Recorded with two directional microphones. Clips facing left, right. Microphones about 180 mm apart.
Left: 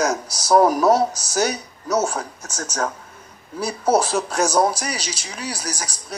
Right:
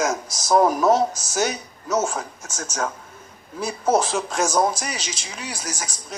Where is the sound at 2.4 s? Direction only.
35° left (ahead or behind).